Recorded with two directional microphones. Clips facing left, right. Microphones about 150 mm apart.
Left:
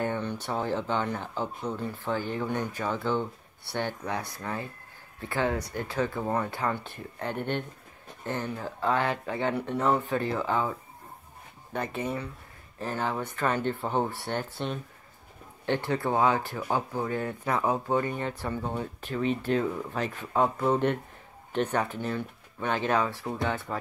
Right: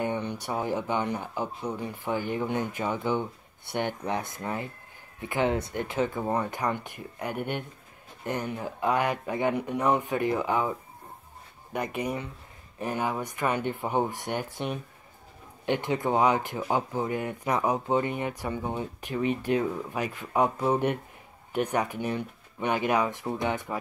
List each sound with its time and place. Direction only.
0.0 s speech: 15° right (ahead or behind)